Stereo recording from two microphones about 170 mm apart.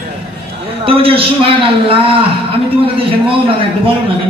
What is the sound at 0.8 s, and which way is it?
A man's voice, 35° right (ahead or behind).